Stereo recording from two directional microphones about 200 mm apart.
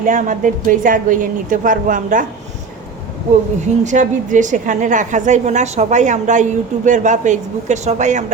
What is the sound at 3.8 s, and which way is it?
A woman's voice, 40° right (ahead or behind).